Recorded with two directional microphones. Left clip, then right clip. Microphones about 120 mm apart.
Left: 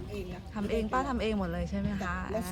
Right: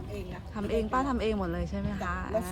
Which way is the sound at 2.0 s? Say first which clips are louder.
Right 4 dB; 5° right (ahead or behind).